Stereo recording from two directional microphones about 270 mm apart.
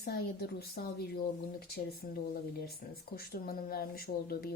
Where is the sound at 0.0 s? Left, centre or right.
Left.